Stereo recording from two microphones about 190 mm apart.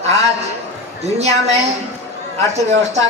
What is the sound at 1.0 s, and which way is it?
Speech, 35° right (ahead or behind).